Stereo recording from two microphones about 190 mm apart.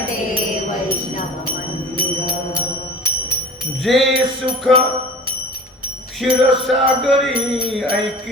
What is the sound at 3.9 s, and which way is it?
Music, centre (ahead or behind).